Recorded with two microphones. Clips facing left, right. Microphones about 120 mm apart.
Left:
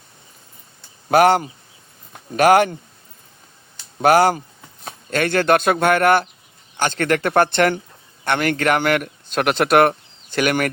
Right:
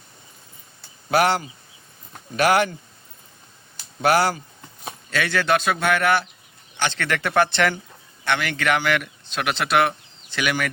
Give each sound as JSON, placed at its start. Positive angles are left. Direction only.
{"t": 1.1, "sound": "a man's voice", "side_deg": 45}
{"t": 4.0, "sound": "a man's voice", "side_deg": 45}